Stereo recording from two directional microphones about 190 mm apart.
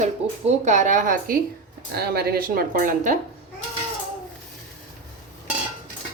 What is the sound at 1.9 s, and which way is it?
Speech, 55° right (ahead or behind).